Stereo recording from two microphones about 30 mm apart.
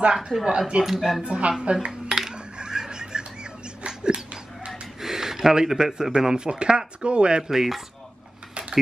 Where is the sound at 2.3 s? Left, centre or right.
Right.